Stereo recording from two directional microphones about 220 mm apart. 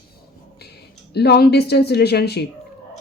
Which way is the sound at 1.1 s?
45° left (ahead or behind).